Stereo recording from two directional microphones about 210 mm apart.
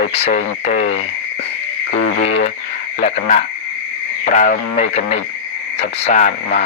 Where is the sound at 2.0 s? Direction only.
65° left (ahead or behind).